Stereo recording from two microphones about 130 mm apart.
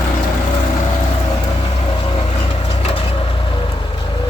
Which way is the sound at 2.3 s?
50° left (ahead or behind).